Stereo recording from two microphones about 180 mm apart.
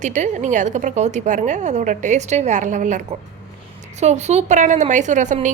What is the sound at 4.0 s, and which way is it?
A woman's voice, 40° right (ahead or behind).